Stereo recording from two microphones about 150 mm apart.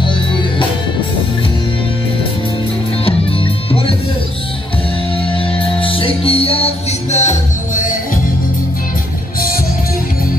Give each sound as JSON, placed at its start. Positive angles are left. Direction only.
{"t": 3.1, "sound": "music", "side_deg": 40}
{"t": 5.4, "sound": "music", "side_deg": 35}